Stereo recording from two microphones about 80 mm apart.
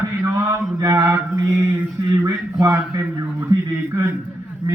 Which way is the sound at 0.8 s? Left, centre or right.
Right.